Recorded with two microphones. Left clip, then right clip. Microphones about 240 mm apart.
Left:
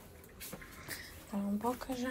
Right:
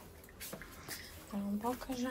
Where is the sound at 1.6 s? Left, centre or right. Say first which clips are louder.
Left 1 dB; centre.